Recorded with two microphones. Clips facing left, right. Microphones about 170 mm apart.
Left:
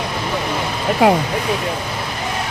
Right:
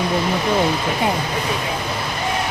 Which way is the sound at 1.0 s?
90° left.